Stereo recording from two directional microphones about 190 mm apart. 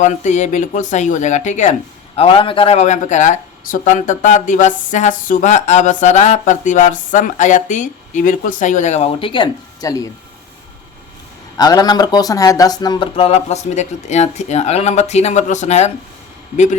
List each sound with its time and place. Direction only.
0.0 s speech: 40° left (ahead or behind); by 10.1 s 20° left (ahead or behind)
11.5 s speech: 20° left (ahead or behind); by 15.9 s 35° left (ahead or behind)